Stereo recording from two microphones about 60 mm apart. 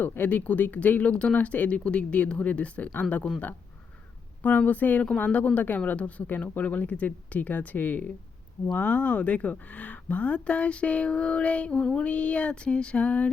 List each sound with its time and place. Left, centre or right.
0.0 s speech: left
4.4 s speech: left